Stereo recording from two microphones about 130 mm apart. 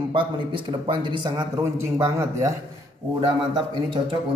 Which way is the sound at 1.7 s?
20° right (ahead or behind).